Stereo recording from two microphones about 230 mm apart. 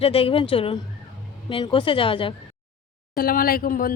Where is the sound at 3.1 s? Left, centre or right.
Left.